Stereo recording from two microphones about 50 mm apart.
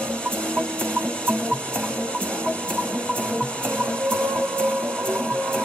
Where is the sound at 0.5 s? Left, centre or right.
Left.